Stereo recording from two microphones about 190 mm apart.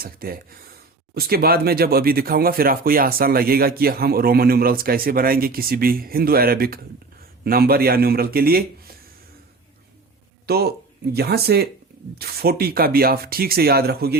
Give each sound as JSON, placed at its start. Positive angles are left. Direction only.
{"t": 0.0, "sound": "speech", "side_deg": -50}
{"t": 10.4, "sound": "speech", "side_deg": -55}